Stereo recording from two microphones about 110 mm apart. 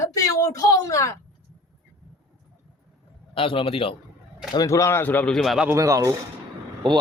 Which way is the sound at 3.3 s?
55° left (ahead or behind).